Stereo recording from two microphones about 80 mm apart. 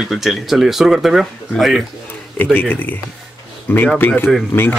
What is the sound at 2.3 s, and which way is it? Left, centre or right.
Speech, left.